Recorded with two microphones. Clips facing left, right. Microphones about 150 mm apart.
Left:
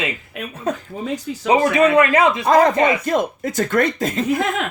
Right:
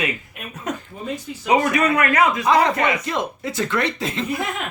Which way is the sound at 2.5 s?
45° left (ahead or behind).